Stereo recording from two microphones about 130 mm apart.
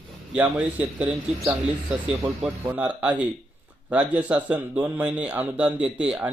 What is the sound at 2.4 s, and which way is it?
A man's voice, 10° right (ahead or behind).